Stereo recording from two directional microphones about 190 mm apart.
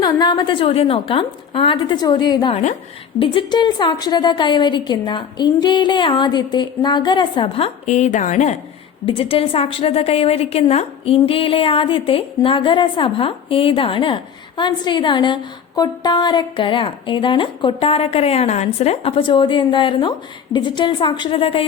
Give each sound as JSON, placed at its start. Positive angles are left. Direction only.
{"t": 0.0, "sound": "a woman's voice", "side_deg": 20}